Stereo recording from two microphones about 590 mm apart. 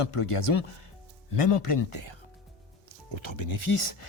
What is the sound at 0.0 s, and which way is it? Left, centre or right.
Speech, left.